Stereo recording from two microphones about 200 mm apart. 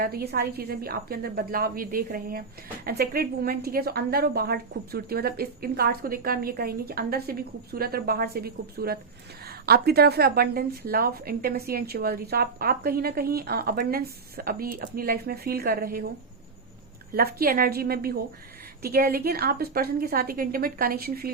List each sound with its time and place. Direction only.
0.0 s a woman's voice: 50° right (ahead or behind)
17.2 s a woman's voice: 50° right (ahead or behind)